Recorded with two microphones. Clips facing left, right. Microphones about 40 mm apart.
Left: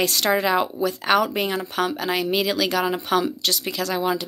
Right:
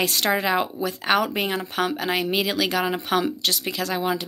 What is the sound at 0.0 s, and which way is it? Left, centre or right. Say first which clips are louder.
Speech: left 2 dB; centre.